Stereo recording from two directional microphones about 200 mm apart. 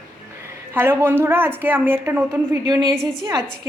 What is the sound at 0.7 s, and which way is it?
A woman's voice, 10° right (ahead or behind).